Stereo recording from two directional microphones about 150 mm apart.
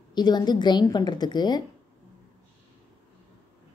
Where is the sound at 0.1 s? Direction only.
30° left (ahead or behind).